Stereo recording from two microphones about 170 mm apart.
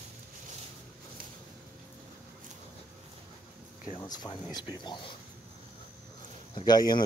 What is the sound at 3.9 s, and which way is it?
Speech, 25° left (ahead or behind).